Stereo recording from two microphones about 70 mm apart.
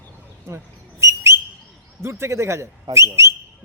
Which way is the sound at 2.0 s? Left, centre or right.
Right.